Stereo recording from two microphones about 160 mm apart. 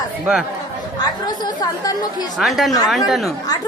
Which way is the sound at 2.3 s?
Centre (ahead or behind).